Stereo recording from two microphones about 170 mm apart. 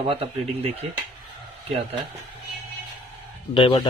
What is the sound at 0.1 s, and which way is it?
Speech, 35° right (ahead or behind).